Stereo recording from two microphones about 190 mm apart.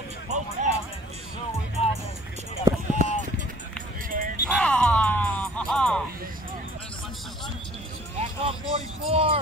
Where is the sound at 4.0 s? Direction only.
45° right (ahead or behind).